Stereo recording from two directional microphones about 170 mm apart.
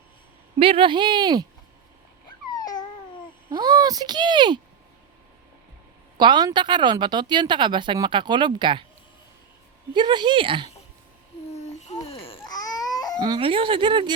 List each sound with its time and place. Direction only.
0.6 s speech: 30° right (ahead or behind)
2.5 s babbling: 25° left (ahead or behind)
3.5 s speech: 25° right (ahead or behind)
6.1 s speech: 25° right (ahead or behind)
9.9 s speech: 25° right (ahead or behind)
12.0 s babbling: 35° left (ahead or behind)
12.5 s crying: 20° left (ahead or behind)
13.1 s speech: 25° right (ahead or behind)